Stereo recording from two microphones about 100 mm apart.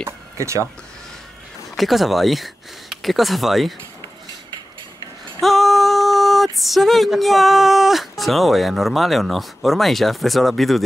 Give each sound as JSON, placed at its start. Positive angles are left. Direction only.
{"t": 0.4, "sound": "speech", "side_deg": -30}
{"t": 1.8, "sound": "speech", "side_deg": 0}
{"t": 5.4, "sound": "speech", "side_deg": 0}